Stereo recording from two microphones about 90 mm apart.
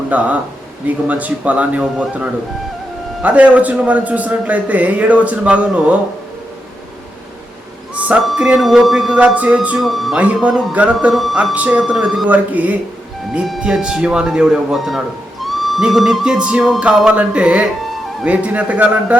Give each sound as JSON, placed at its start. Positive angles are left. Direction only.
{"t": 0.1, "sound": "a man's voice", "side_deg": -15}
{"t": 7.9, "sound": "a sound", "side_deg": -15}
{"t": 8.4, "sound": "a man's voice", "side_deg": -10}
{"t": 9.1, "sound": "a man's voice", "side_deg": -15}
{"t": 9.7, "sound": "speech", "side_deg": 0}
{"t": 10.2, "sound": "a man's voice", "side_deg": -15}
{"t": 11.1, "sound": "speech", "side_deg": 0}
{"t": 11.5, "sound": "a man's voice", "side_deg": -15}
{"t": 13.3, "sound": "a man's voice", "side_deg": -5}